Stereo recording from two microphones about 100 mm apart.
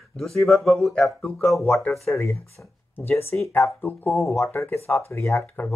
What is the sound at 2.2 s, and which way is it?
Speech, 30° left (ahead or behind).